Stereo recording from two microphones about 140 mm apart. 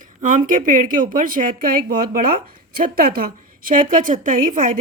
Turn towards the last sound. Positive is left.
turn(degrees=-70)  # may be behind; listen again after turning